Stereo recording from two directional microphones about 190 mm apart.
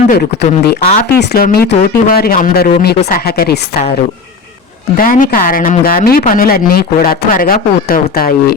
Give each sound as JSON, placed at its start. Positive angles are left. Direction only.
{"t": 0.1, "sound": "speech", "side_deg": 50}
{"t": 4.9, "sound": "speech", "side_deg": 45}